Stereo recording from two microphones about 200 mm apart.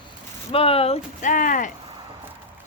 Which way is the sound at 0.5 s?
30° left (ahead or behind).